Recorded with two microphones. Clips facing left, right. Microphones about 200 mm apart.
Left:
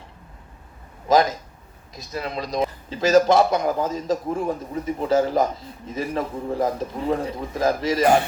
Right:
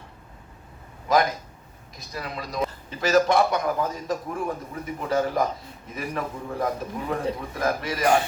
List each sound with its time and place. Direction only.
1.0 s a man's voice: 25° left (ahead or behind)